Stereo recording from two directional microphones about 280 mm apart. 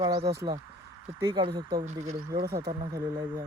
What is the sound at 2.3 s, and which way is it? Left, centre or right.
Speech, right.